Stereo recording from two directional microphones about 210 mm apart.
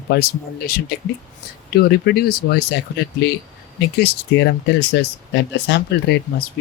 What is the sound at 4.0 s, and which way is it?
Speech, 50° left (ahead or behind).